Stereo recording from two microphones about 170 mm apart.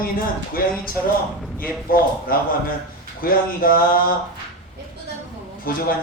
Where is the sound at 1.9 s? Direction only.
60° left (ahead or behind).